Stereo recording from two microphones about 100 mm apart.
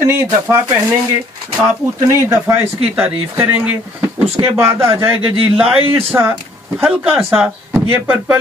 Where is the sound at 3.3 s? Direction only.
15° right (ahead or behind).